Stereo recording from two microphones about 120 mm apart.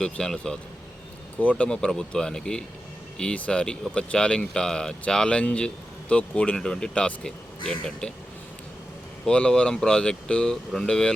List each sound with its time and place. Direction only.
0.0 s speech: 5° left (ahead or behind)
9.2 s speech: 5° left (ahead or behind)